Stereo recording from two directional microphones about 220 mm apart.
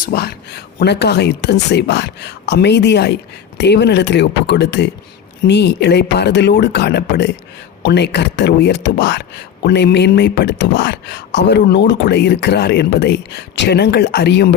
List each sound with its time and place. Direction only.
0.0 s speech: 45° left (ahead or behind)